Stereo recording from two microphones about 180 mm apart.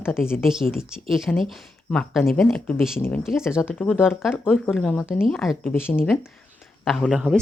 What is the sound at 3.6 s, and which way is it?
Speech, 10° left (ahead or behind).